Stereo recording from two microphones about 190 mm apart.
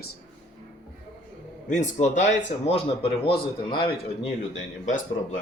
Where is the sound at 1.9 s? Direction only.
40° left (ahead or behind).